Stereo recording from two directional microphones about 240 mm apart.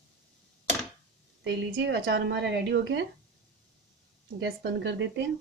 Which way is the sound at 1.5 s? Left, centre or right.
Right.